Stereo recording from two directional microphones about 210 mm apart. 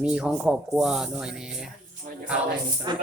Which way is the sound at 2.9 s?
20° right (ahead or behind).